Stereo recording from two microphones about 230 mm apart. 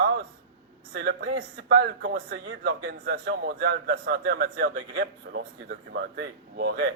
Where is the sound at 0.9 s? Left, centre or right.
Right.